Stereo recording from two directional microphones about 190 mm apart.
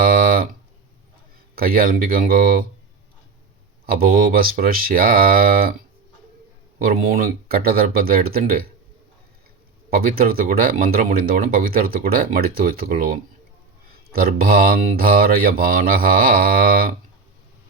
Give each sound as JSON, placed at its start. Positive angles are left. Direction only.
{"t": 0.0, "sound": "music", "side_deg": -50}
{"t": 1.5, "sound": "speech", "side_deg": -50}
{"t": 3.8, "sound": "speech", "side_deg": -50}
{"t": 9.9, "sound": "speech", "side_deg": -50}